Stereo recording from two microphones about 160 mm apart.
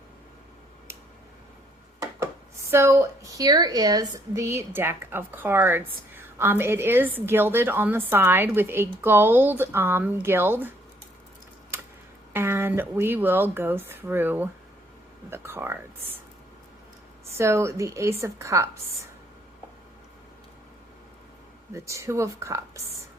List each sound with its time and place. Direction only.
2.0 s speech: 20° right (ahead or behind)
12.3 s speech: 15° right (ahead or behind)
17.3 s a woman's voice: 15° right (ahead or behind)
21.7 s a woman's voice: 20° right (ahead or behind)